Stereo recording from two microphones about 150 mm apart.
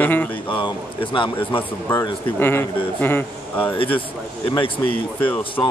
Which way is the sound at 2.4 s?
15° left (ahead or behind).